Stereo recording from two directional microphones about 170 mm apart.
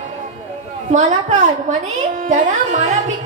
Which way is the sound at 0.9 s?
45° right (ahead or behind).